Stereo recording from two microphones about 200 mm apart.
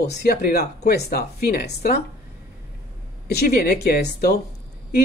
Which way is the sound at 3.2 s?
50° left (ahead or behind).